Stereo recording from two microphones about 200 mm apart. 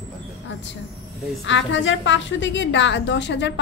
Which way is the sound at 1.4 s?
65° left (ahead or behind).